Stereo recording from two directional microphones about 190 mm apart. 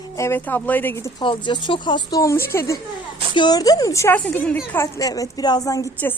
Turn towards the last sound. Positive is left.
turn(degrees=15)  # may be behind; listen again after turning